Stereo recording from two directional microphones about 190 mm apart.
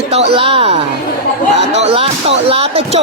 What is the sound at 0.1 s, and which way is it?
Speech, 30° right (ahead or behind).